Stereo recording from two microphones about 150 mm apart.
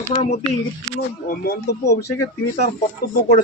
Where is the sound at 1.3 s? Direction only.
90° left.